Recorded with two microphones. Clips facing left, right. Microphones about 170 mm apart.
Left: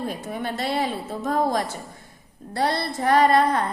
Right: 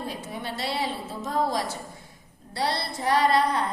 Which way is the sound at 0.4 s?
50° left (ahead or behind).